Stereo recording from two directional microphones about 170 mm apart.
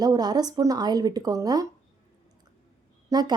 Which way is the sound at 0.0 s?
25° right (ahead or behind).